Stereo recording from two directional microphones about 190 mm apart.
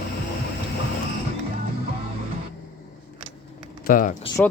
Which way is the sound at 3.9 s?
45° left (ahead or behind).